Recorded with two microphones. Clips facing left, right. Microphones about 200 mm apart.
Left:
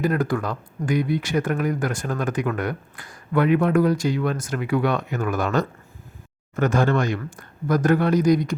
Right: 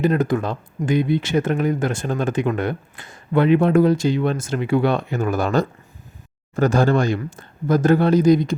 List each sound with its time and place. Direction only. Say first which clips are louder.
0.0 s speech: right 3 dB; 25° right (ahead or behind)